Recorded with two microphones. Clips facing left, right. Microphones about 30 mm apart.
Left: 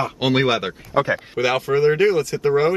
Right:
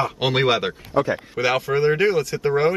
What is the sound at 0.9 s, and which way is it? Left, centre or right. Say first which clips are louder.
Speech: left 2 dB; left.